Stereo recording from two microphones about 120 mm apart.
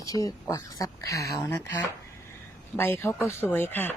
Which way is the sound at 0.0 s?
30° left (ahead or behind).